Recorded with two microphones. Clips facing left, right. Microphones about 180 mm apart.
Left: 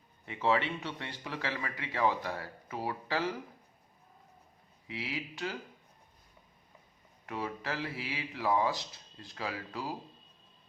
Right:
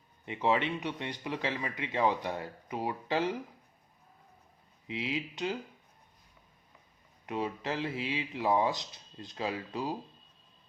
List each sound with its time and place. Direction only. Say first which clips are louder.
0.3 s speech: right 1 dB; 20° right (ahead or behind)
4.9 s speech: right 4 dB; 20° right (ahead or behind)
7.3 s speech: right 3 dB; 20° right (ahead or behind)